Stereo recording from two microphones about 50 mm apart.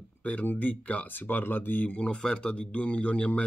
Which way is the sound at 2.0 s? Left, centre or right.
Left.